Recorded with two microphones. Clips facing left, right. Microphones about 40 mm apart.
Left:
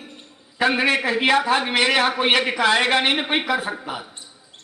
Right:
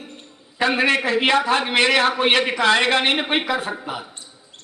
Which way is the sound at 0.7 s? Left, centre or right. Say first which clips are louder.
Right 1 dB; centre.